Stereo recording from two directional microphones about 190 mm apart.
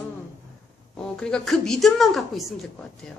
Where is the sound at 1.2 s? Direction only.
5° left (ahead or behind).